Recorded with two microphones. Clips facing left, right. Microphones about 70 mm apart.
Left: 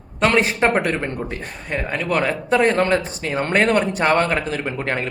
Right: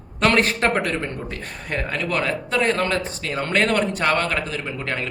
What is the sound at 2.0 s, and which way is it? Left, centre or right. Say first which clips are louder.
Speech: left 4 dB; left.